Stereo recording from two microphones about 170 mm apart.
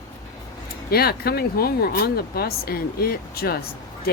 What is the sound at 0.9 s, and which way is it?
Speech, 65° left (ahead or behind).